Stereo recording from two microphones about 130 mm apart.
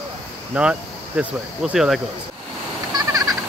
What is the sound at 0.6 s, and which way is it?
Speech, 10° right (ahead or behind).